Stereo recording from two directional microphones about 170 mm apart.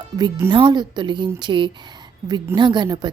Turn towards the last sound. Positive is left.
turn(degrees=-25)  # may be behind; listen again after turning